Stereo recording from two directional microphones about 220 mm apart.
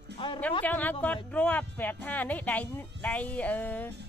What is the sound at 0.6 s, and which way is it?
Speech, 5° left (ahead or behind).